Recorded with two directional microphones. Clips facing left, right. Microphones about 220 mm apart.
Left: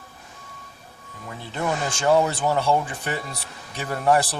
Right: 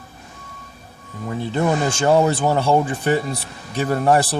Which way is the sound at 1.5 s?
30° right (ahead or behind).